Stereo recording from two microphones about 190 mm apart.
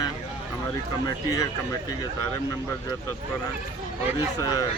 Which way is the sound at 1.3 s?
20° left (ahead or behind).